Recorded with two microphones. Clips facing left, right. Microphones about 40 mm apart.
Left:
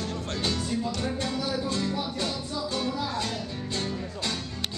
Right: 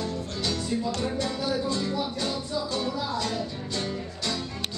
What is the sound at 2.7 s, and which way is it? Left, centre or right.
Music, left.